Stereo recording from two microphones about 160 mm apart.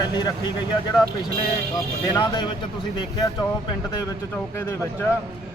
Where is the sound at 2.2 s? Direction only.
30° left (ahead or behind).